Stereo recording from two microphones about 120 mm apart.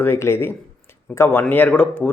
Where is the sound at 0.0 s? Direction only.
20° left (ahead or behind).